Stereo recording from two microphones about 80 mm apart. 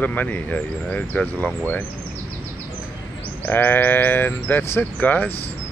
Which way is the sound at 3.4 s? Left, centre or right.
Left.